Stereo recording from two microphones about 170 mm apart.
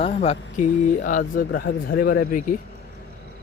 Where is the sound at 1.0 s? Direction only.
50° left (ahead or behind); by 2.3 s 65° left (ahead or behind).